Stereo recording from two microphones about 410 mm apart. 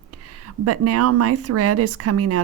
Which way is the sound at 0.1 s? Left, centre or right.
Right.